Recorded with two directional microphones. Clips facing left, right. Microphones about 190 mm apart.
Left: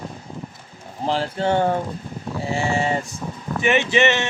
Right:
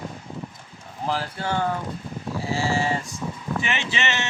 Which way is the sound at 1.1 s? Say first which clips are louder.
Left 6 dB; 25° left (ahead or behind).